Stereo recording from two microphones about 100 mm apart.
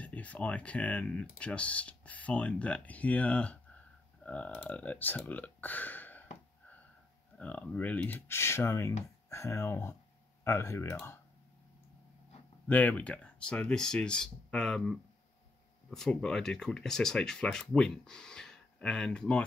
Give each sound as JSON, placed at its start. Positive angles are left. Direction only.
{"t": 0.0, "sound": "speech", "side_deg": 15}
{"t": 7.3, "sound": "speech", "side_deg": 15}
{"t": 12.6, "sound": "speech", "side_deg": 15}